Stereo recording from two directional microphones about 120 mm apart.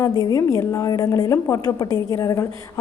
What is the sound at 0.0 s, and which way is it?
A woman's voice, 30° left (ahead or behind).